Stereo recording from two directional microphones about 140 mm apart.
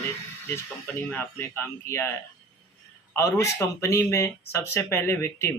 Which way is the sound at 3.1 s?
20° left (ahead or behind).